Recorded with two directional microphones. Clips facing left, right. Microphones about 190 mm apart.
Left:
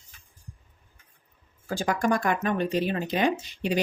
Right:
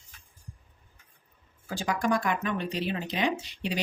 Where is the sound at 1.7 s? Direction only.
50° left (ahead or behind).